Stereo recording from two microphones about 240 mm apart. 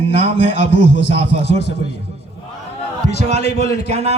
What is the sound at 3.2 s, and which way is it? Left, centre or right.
Speech, right.